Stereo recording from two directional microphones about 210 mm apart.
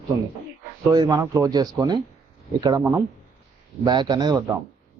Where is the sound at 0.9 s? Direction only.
15° right (ahead or behind).